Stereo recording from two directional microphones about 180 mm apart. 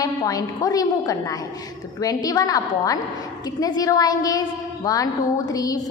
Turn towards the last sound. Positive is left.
turn(degrees=20)  # may be behind; listen again after turning